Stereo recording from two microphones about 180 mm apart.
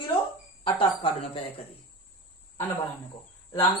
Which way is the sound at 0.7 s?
30° left (ahead or behind).